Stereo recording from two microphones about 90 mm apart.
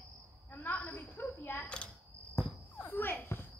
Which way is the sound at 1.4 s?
30° left (ahead or behind).